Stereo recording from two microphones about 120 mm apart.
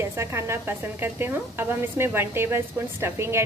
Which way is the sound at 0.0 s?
25° right (ahead or behind).